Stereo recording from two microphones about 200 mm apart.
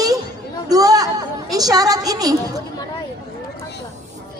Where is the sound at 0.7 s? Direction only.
20° right (ahead or behind).